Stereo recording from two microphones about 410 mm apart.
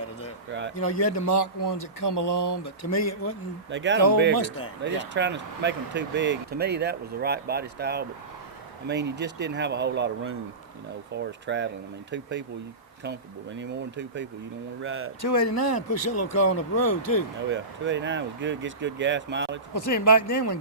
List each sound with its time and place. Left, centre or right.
0.9 s a man's voice: left
1.7 s speech: left
2.9 s speech: left
3.7 s speech: right
15.3 s speech: left
17.5 s speech: right
19.9 s a man's voice: left